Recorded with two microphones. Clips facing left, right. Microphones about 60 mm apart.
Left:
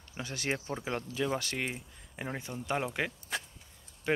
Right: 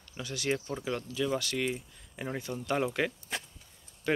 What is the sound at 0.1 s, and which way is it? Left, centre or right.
Speech, left.